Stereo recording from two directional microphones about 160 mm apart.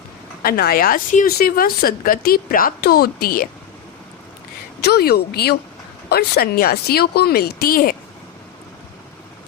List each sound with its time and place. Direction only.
0.4 s speech: 70° left (ahead or behind)
4.8 s speech: 85° left; by 7.9 s 65° left (ahead or behind)